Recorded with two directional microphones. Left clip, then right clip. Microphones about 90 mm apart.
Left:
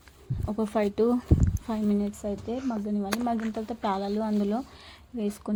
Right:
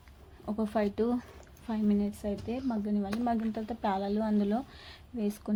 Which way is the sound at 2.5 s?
40° left (ahead or behind).